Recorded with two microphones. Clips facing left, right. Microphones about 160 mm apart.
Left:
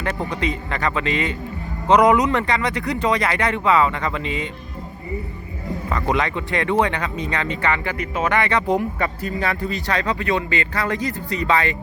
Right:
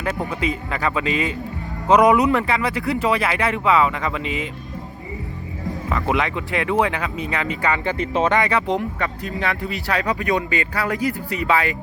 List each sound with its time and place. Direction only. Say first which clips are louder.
0.0 s speech: even; 5° right (ahead or behind)
5.9 s speech: even; 5° right (ahead or behind)
7.9 s speech: right 2 dB; 30° right (ahead or behind)
8.6 s speech: left 2 dB; centre (ahead or behind)